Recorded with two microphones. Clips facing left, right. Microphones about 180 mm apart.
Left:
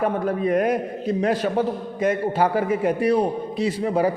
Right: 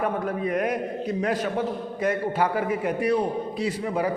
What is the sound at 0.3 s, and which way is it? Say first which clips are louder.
A man's voice: left 5 dB; 35° left (ahead or behind).